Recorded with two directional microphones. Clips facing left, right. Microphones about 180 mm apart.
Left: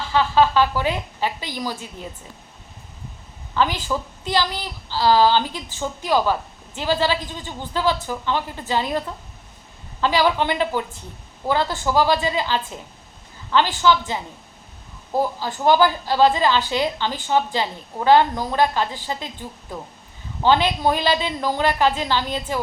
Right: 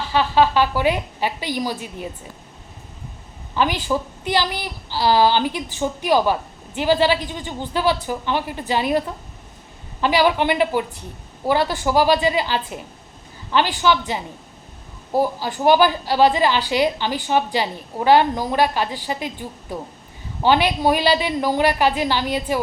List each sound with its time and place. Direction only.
0.1 s a woman's voice: 15° right (ahead or behind)
3.5 s a woman's voice: 15° right (ahead or behind)